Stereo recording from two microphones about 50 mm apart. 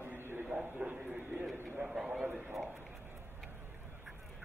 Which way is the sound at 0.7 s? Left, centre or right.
Right.